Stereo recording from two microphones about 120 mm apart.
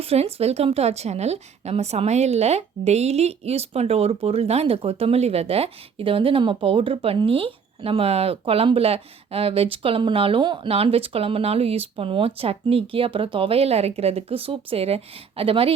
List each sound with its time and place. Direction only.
0.0 s a woman's voice: 55° right (ahead or behind)